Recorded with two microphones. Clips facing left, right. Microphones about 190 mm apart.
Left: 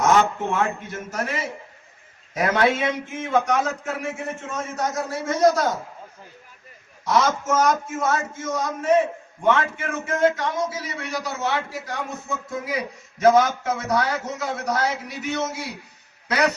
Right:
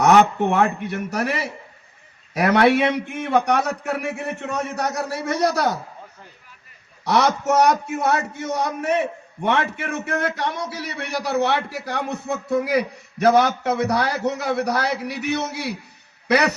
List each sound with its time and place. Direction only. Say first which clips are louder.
0.0 s a man's voice: right 4 dB; 65° right (ahead or behind)
7.0 s a man's voice: right 2 dB; 65° right (ahead or behind)